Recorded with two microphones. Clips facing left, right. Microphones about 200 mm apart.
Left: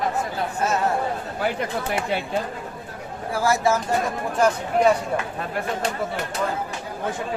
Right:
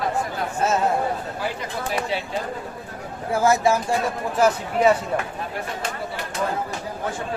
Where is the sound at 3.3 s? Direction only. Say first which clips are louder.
Right 2 dB; 20° right (ahead or behind).